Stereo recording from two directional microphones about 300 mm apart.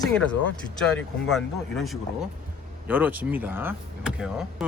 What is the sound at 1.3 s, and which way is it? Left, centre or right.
Speech, centre.